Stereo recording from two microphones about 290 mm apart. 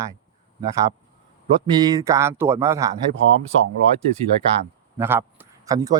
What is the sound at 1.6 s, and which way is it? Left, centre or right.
A man's voice, centre.